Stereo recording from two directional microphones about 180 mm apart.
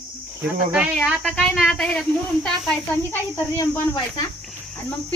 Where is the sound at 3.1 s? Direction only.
15° left (ahead or behind).